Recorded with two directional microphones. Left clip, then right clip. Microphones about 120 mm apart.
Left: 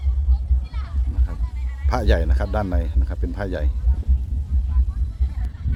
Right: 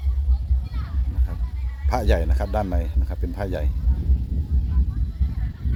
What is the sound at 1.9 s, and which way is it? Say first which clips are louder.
Speech: left 1 dB; 10° right (ahead or behind).